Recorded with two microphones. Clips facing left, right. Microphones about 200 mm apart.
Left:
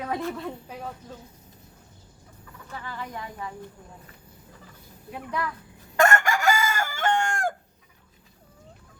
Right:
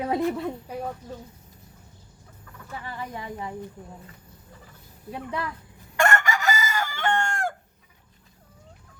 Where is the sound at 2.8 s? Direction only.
25° right (ahead or behind).